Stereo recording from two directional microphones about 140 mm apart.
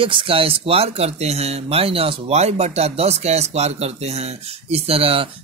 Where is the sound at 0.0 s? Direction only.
40° right (ahead or behind).